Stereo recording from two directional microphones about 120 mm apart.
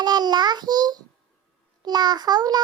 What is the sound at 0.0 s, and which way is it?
Child singing, 35° right (ahead or behind).